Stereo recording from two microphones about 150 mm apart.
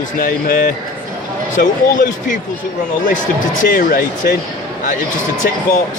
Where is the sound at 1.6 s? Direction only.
65° left (ahead or behind).